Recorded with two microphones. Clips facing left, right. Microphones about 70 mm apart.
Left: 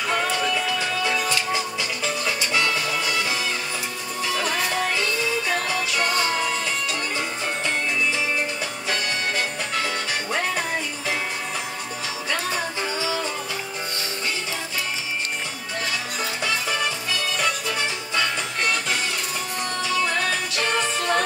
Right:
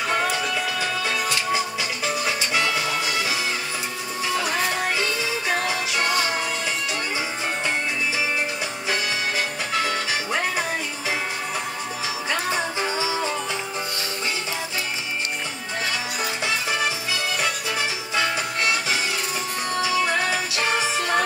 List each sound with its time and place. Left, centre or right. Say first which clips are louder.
0.7 s music: left 1 dB; centre
5.5 s music: even; centre
12.8 s music: right 1 dB; right
16.4 s music: even; centre